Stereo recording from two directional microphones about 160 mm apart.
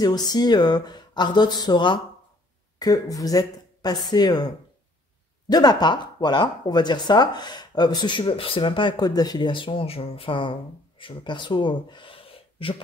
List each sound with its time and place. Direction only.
0.0 s speech: 25° left (ahead or behind)
5.5 s speech: 25° left (ahead or behind)